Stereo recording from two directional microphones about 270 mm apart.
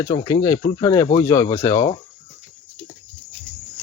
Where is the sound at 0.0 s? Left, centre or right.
Centre.